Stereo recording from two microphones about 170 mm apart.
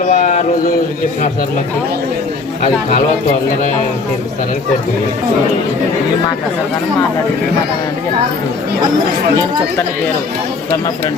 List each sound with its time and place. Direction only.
0.1 s speech: 50° left (ahead or behind)